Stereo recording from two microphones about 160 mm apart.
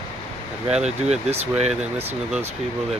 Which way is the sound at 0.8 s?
45° right (ahead or behind).